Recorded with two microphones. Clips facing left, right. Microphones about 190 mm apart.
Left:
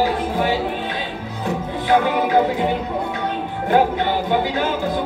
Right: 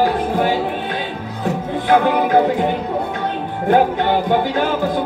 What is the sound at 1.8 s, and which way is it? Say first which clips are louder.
Music: right 2 dB; 50° right (ahead or behind).